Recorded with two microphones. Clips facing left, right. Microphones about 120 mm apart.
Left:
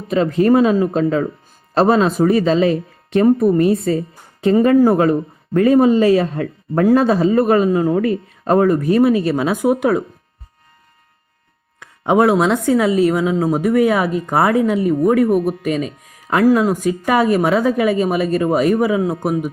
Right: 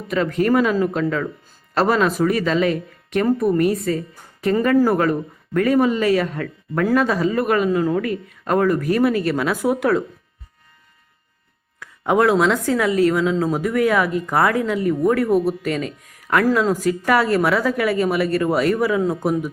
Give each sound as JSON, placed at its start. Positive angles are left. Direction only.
{"t": 0.1, "sound": "speech", "side_deg": 25}
{"t": 11.8, "sound": "speech", "side_deg": 20}